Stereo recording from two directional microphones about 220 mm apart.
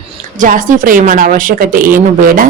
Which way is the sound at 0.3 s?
35° right (ahead or behind).